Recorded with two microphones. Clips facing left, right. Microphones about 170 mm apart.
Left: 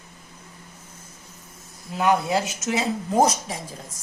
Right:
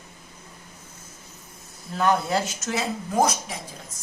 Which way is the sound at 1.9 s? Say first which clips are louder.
Left 1 dB; 15° left (ahead or behind).